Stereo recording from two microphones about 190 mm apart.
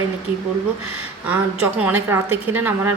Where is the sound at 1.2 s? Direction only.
5° right (ahead or behind).